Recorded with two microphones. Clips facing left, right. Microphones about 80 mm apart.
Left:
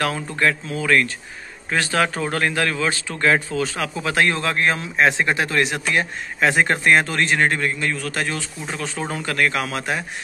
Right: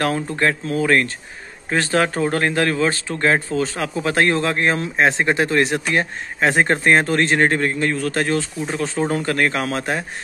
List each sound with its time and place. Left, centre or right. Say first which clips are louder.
0.0 s speech: right 2 dB; right